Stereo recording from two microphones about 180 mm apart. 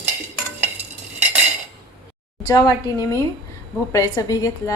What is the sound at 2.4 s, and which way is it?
A woman's voice, 20° left (ahead or behind).